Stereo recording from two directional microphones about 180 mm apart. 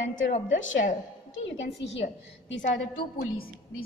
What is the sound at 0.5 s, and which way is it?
Speech, 90° left.